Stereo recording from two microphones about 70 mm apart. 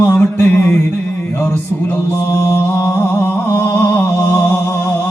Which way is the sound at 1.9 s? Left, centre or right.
Left.